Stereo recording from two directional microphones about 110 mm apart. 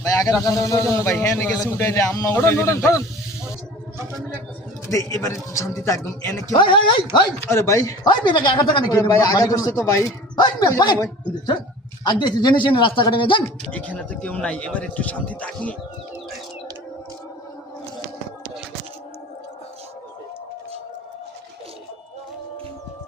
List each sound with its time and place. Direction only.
0.0 s a man's voice: 30° left (ahead or behind)
4.9 s a man's voice: 30° left (ahead or behind)
6.6 s speech: 45° left (ahead or behind)
7.4 s a man's voice: 25° left (ahead or behind)
8.1 s speech: 45° left (ahead or behind)
9.0 s a man's voice: 35° left (ahead or behind)
12.0 s speech: 40° left (ahead or behind)
13.7 s a man's voice: 15° left (ahead or behind)